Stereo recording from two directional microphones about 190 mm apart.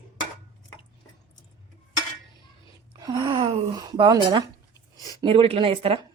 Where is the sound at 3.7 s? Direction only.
20° right (ahead or behind).